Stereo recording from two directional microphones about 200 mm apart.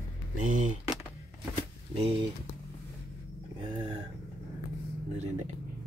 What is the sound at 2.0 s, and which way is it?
Speech, 25° right (ahead or behind).